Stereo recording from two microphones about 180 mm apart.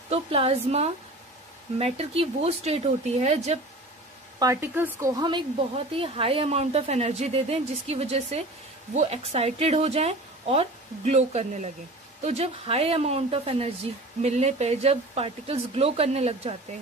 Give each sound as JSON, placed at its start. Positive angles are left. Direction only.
{"t": 0.1, "sound": "speech", "side_deg": -30}
{"t": 4.4, "sound": "speech", "side_deg": -15}